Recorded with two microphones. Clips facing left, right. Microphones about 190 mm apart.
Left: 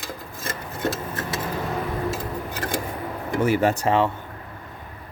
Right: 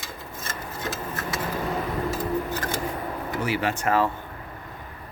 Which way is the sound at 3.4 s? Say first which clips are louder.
Left 7 dB; 45° left (ahead or behind).